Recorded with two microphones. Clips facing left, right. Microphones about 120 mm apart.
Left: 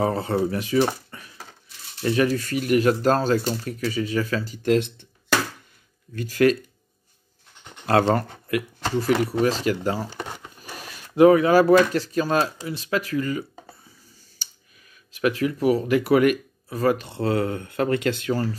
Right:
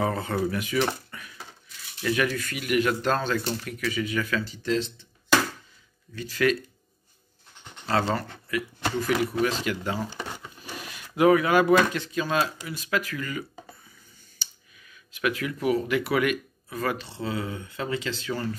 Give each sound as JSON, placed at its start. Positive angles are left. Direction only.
{"t": 0.0, "sound": "speech", "side_deg": 30}
{"t": 1.1, "sound": "a sound", "side_deg": 30}
{"t": 2.0, "sound": "speech", "side_deg": 35}
{"t": 4.6, "sound": "speech", "side_deg": 60}
{"t": 6.1, "sound": "speech", "side_deg": 45}
{"t": 7.8, "sound": "speech", "side_deg": 50}
{"t": 8.9, "sound": "speech", "side_deg": 35}
{"t": 15.1, "sound": "speech", "side_deg": 35}
{"t": 18.3, "sound": "speech", "side_deg": 35}